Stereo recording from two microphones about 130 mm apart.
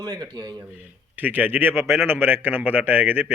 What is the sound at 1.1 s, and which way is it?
A man's voice, 15° right (ahead or behind).